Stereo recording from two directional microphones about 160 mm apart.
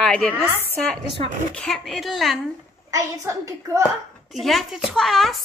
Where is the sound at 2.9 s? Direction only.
20° right (ahead or behind).